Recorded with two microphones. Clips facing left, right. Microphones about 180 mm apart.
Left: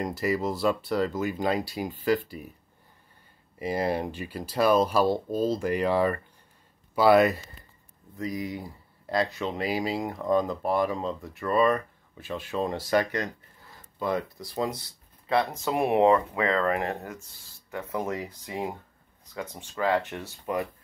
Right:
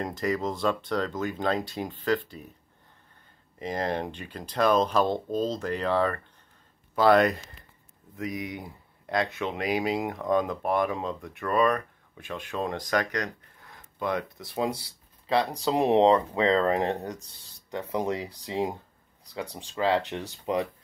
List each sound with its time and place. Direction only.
0.0 s speech: 5° left (ahead or behind)
3.5 s speech: 10° left (ahead or behind)
8.4 s speech: centre (ahead or behind)
14.4 s speech: 25° right (ahead or behind)
18.1 s speech: 30° right (ahead or behind)
18.4 s speech: 20° right (ahead or behind)